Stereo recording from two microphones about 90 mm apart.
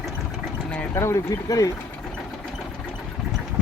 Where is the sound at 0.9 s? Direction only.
30° left (ahead or behind).